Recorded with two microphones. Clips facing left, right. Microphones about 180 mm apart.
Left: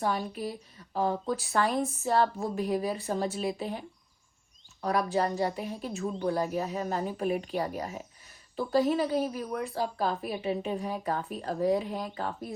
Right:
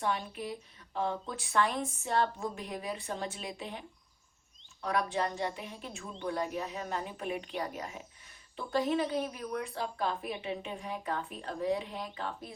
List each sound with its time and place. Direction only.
0.0 s a woman's voice: 40° left (ahead or behind)